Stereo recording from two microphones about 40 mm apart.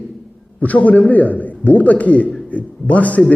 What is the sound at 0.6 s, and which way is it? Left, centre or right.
A man's voice, left.